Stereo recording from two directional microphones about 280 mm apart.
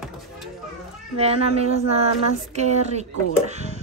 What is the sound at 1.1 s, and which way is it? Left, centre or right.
A woman's voice, right.